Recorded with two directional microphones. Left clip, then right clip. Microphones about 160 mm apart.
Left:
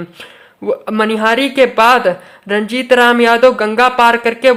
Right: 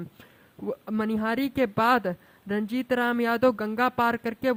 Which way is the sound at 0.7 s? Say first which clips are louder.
Left 16 dB; 45° right (ahead or behind).